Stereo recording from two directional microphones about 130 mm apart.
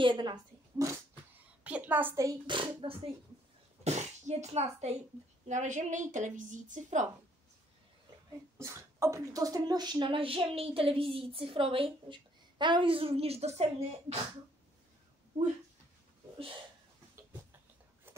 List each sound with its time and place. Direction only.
0.0 s a woman's voice: 35° right (ahead or behind)
1.6 s a sound: 10° right (ahead or behind)
2.4 s speech: 40° right (ahead or behind)
3.8 s a child's voice: 60° right (ahead or behind)
5.5 s a woman's voice: 70° right (ahead or behind)
8.5 s speech: 20° right (ahead or behind); by 14.2 s 55° right (ahead or behind)